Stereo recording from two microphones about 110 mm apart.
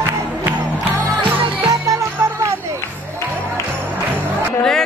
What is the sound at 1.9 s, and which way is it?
Music, 25° right (ahead or behind).